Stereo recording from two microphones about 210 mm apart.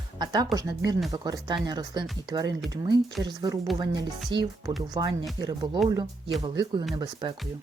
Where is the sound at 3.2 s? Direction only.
20° right (ahead or behind).